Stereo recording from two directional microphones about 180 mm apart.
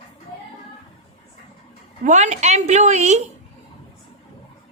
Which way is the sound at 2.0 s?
40° right (ahead or behind).